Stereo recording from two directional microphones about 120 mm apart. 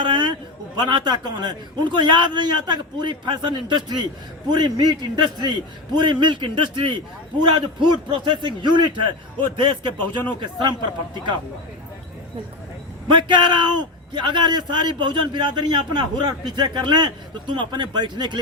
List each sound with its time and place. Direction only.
0.0 s a sound: 40° right (ahead or behind)
0.8 s a man's voice: 35° right (ahead or behind)
13.1 s a man's voice: 40° right (ahead or behind)